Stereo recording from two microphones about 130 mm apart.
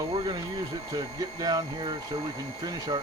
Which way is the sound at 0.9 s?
30° right (ahead or behind).